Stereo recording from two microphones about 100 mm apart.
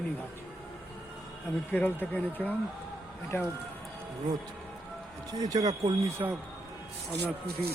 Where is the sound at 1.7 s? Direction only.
20° left (ahead or behind).